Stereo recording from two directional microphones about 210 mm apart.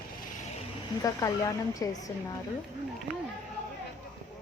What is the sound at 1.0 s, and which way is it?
Speech, 15° left (ahead or behind).